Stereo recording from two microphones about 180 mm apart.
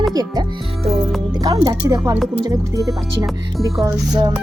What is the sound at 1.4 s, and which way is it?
Speech, 20° right (ahead or behind).